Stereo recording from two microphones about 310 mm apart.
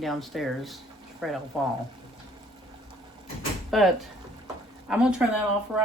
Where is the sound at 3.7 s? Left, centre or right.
Centre.